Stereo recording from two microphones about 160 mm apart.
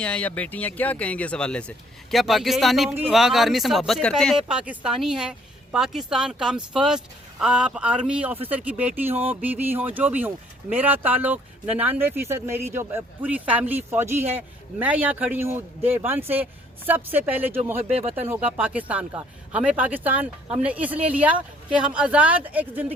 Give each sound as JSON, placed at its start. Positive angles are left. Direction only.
{"t": 0.0, "sound": "speech", "side_deg": 5}
{"t": 17.8, "sound": "speech", "side_deg": -40}
{"t": 18.5, "sound": "speech", "side_deg": -10}